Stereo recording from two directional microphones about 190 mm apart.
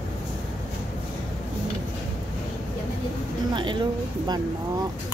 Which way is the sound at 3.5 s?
25° right (ahead or behind).